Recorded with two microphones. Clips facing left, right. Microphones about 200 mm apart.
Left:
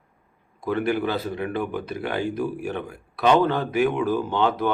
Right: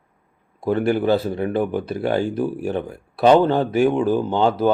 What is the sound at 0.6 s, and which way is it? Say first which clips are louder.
Speech: right 4 dB; 35° right (ahead or behind).